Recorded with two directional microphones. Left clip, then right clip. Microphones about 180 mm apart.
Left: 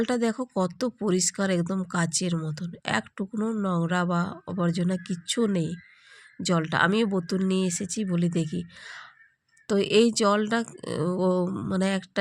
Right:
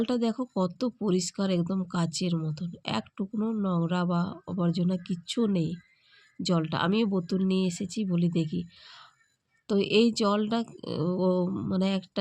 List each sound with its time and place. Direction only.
0.0 s speech: 10° left (ahead or behind)